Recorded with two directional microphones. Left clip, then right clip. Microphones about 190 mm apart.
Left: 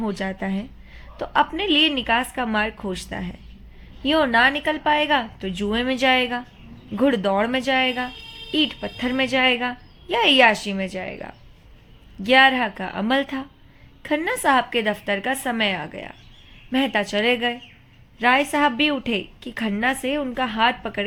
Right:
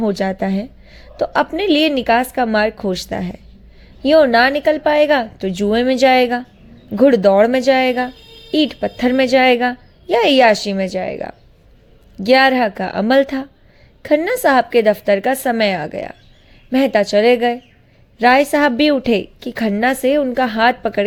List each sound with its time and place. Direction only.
0.0 s a woman's voice: 35° right (ahead or behind)